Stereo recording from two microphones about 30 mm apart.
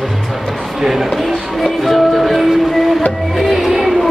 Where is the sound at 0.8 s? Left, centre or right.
Centre.